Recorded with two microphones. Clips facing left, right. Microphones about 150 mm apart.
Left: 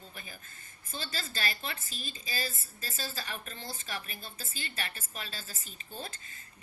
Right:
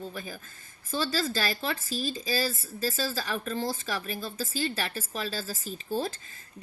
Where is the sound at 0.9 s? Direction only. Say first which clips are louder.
Right 12 dB; 90° right.